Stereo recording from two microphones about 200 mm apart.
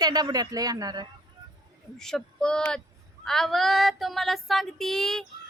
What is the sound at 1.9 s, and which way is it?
Speech, 5° left (ahead or behind).